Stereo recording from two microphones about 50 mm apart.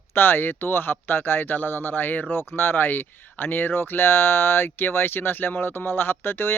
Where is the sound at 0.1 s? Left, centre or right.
Left.